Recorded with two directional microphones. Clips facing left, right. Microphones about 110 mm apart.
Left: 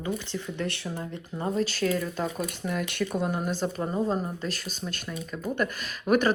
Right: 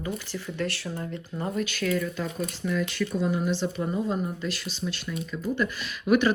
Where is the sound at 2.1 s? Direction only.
45° left (ahead or behind).